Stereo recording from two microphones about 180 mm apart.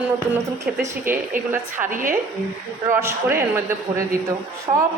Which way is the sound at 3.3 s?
15° right (ahead or behind).